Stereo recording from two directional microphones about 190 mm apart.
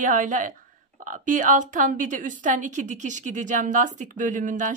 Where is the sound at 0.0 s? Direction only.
45° right (ahead or behind).